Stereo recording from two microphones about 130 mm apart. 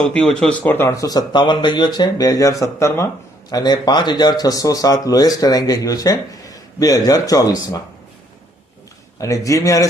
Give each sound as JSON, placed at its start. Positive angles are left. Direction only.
{"t": 0.0, "sound": "speech", "side_deg": 5}
{"t": 3.5, "sound": "speech", "side_deg": 30}
{"t": 9.1, "sound": "speech", "side_deg": 25}